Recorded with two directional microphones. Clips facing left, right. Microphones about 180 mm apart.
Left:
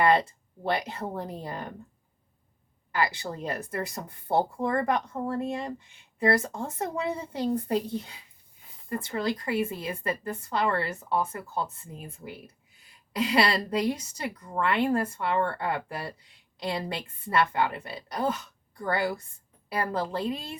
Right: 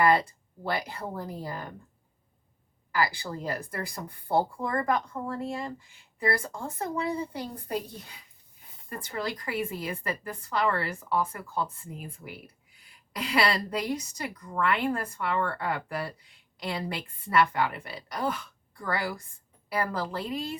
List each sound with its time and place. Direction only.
0.0 s speech: 25° left (ahead or behind)
2.9 s speech: 25° left (ahead or behind)